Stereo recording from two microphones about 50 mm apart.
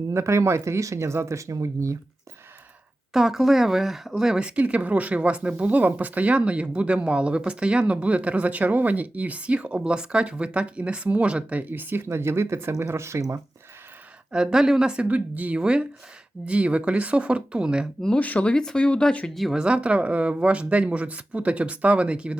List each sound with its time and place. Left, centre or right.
0.1 s speech: right
3.1 s speech: centre; by 11.6 s right
11.6 s speech: right
12.0 s speech: right
14.3 s speech: centre
15.0 s speech: right
15.5 s speech: centre
18.2 s speech: left
19.3 s speech: centre
19.5 s speech: centre